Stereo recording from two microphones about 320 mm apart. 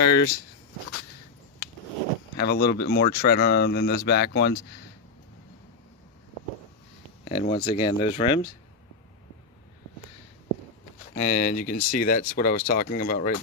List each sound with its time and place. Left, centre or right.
0.0 s speech: left
2.4 s speech: left
7.3 s speech: centre
11.1 s speech: left